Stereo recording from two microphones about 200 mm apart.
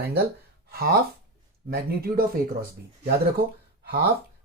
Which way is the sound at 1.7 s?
50° right (ahead or behind).